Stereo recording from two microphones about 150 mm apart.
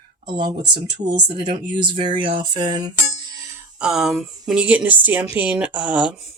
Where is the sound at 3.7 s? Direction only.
5° right (ahead or behind).